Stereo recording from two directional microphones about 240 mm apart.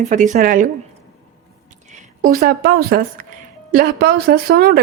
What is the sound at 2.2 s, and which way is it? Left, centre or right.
Speech, right.